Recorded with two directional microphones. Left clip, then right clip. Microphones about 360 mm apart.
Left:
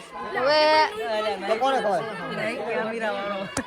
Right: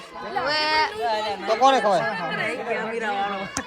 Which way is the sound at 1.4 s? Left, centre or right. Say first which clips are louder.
Right 6 dB; right.